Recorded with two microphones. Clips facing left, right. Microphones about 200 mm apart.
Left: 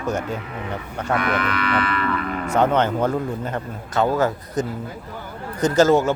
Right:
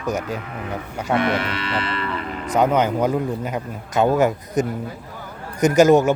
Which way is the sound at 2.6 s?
10° right (ahead or behind).